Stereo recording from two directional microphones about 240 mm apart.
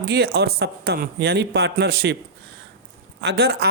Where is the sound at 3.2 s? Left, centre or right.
Right.